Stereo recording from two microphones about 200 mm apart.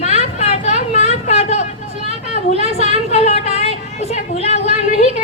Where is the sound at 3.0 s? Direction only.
35° left (ahead or behind).